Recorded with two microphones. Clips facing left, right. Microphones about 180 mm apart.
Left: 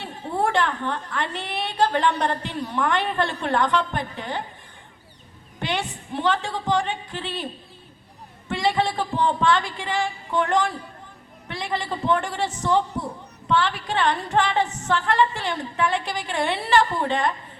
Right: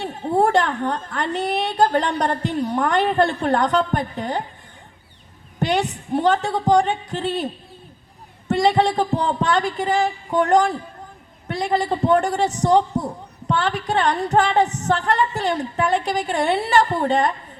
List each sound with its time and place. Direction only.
0.0 s a woman's voice: 45° right (ahead or behind)
5.5 s a sound: 40° right (ahead or behind)
6.1 s a woman's voice: 45° right (ahead or behind)
8.4 s a woman's voice: 45° right (ahead or behind)